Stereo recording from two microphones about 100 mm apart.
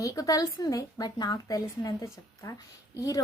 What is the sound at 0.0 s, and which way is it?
A woman's voice, 35° left (ahead or behind).